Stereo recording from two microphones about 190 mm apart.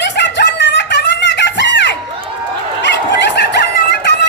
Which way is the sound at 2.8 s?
70° left (ahead or behind).